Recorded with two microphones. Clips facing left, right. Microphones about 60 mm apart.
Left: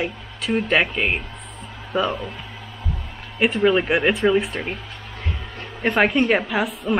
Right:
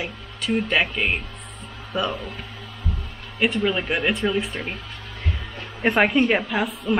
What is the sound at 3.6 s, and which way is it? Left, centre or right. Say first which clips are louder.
Speech: left 5 dB; centre.